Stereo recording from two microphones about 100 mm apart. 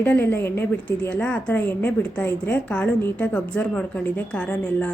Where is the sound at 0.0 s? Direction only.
20° left (ahead or behind).